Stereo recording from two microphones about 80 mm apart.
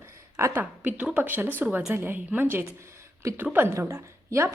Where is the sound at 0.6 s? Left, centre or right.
Centre.